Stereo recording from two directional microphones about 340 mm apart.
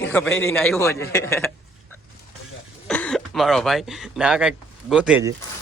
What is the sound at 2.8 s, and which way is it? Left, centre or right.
Speech, centre.